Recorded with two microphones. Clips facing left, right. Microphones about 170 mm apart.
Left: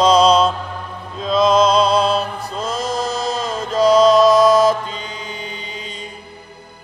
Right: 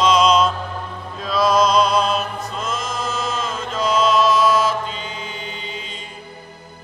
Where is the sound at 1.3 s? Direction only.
25° left (ahead or behind).